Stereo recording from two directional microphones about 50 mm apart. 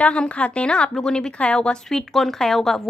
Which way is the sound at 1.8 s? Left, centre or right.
Centre.